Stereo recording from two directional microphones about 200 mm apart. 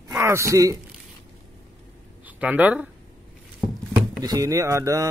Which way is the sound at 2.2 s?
10° right (ahead or behind).